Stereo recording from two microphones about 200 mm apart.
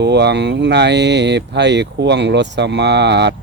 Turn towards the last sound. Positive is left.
turn(degrees=-60)  # may be behind; listen again after turning